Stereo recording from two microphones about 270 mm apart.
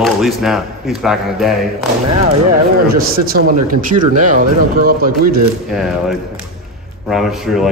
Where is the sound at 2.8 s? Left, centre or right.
Right.